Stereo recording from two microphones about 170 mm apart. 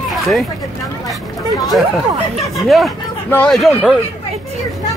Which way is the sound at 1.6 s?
Centre (ahead or behind).